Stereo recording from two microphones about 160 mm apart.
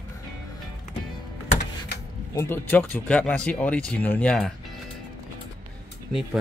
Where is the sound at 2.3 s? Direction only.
15° left (ahead or behind).